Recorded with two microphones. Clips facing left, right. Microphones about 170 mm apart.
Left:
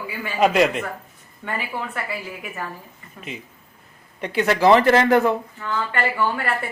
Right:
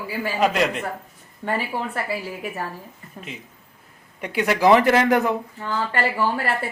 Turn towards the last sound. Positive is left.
turn(degrees=-35)  # may be behind; listen again after turning